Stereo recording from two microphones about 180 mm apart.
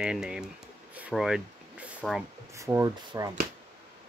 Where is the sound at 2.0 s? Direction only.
Centre (ahead or behind).